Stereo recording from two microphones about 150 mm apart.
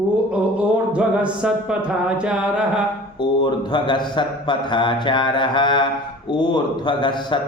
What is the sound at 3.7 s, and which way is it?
Speech, 30° left (ahead or behind).